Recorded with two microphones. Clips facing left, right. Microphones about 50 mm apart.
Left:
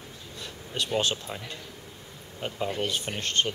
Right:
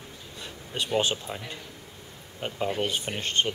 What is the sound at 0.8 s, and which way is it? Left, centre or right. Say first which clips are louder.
Speech: right 2 dB; centre.